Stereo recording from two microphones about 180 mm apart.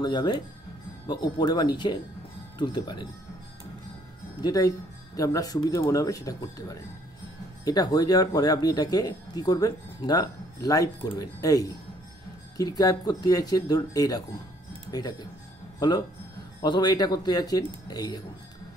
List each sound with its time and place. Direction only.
0.0 s speech: 25° left (ahead or behind)
4.4 s speech: 20° left (ahead or behind)
16.6 s speech: 25° left (ahead or behind)